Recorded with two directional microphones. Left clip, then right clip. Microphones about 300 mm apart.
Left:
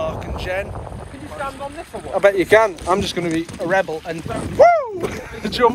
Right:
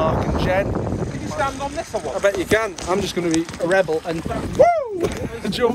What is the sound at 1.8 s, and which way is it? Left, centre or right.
Speech, right.